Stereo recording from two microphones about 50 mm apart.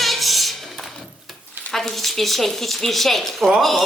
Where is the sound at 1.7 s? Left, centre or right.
Centre.